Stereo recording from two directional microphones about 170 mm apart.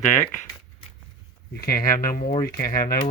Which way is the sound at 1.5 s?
65° left (ahead or behind).